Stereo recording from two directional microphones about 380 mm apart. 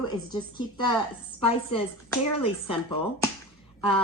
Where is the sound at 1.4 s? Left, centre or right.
Centre.